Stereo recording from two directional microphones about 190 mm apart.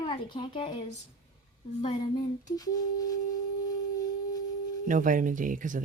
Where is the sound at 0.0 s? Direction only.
25° left (ahead or behind).